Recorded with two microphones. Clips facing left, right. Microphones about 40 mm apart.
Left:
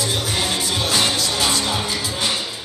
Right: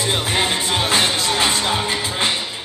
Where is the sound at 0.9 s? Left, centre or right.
Right.